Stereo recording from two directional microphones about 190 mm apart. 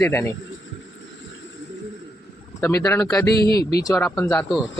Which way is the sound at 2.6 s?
15° left (ahead or behind).